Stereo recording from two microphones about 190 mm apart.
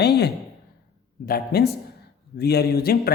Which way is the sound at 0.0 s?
60° left (ahead or behind).